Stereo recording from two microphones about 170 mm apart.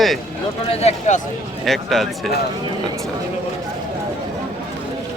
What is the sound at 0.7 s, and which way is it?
Speech, 40° left (ahead or behind).